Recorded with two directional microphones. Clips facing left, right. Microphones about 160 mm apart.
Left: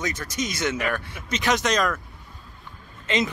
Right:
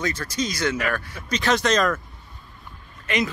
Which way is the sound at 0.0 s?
15° left (ahead or behind).